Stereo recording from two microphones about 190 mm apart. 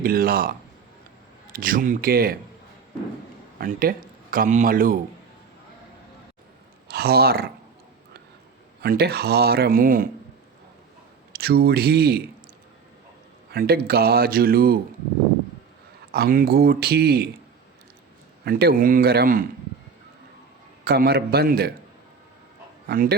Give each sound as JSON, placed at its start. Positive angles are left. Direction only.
{"t": 0.0, "sound": "speech", "side_deg": -50}
{"t": 1.5, "sound": "speech", "side_deg": -50}
{"t": 3.6, "sound": "speech", "side_deg": -50}
{"t": 6.8, "sound": "speech", "side_deg": -55}
{"t": 8.8, "sound": "speech", "side_deg": -55}
{"t": 11.3, "sound": "speech", "side_deg": -55}
{"t": 13.5, "sound": "speech", "side_deg": -55}
{"t": 16.1, "sound": "speech", "side_deg": -50}
{"t": 18.4, "sound": "speech", "side_deg": -55}
{"t": 20.8, "sound": "speech", "side_deg": -55}
{"t": 22.9, "sound": "speech", "side_deg": -55}